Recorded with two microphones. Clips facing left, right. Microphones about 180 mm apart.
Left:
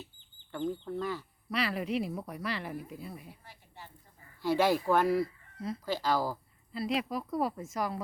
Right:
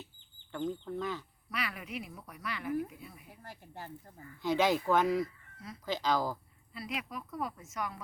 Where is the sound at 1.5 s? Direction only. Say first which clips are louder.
Left 8 dB; 30° left (ahead or behind).